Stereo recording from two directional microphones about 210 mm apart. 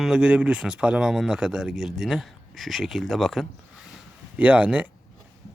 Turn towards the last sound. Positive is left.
turn(degrees=-5)  # may be behind; listen again after turning